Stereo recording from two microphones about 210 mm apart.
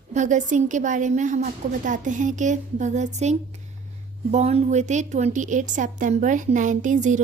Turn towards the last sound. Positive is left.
turn(degrees=-35)  # may be behind; listen again after turning